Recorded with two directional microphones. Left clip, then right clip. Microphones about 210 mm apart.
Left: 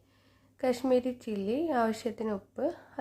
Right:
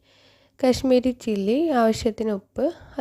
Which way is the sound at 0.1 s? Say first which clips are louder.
Right 13 dB; 40° right (ahead or behind).